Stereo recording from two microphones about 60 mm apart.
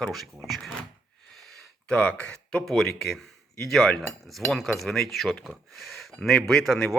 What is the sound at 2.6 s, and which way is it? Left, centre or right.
Speech, centre.